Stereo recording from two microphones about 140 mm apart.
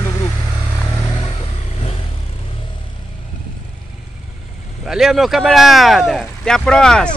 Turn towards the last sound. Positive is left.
turn(degrees=5)  # may be behind; listen again after turning